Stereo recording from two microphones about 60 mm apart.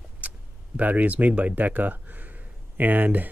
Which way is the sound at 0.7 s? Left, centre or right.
Right.